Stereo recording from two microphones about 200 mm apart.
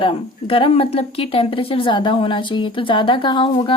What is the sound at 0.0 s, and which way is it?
Speech, 25° left (ahead or behind).